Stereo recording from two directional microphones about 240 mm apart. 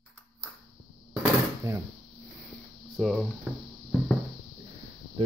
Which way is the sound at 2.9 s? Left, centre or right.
Centre.